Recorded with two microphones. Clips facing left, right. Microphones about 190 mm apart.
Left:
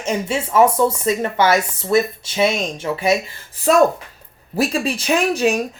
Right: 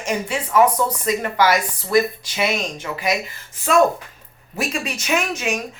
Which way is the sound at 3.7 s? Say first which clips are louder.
Left 2 dB; 35° left (ahead or behind).